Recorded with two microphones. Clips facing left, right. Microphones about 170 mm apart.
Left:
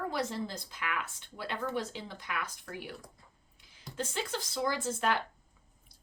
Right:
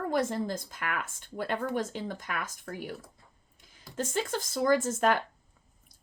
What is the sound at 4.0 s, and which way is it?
Speech, 45° right (ahead or behind).